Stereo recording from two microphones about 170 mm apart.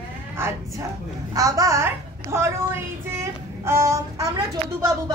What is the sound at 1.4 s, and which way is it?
A woman's voice, 20° right (ahead or behind).